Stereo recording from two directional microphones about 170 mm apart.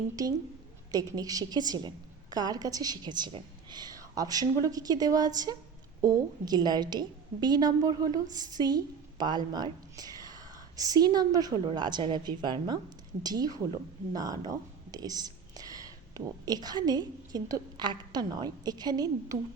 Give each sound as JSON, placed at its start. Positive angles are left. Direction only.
{"t": 0.9, "sound": "a woman's voice", "side_deg": -20}